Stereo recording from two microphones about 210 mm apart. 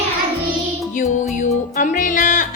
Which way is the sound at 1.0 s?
35° left (ahead or behind).